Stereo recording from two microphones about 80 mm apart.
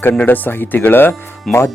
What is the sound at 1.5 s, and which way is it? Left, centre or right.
Speech, centre.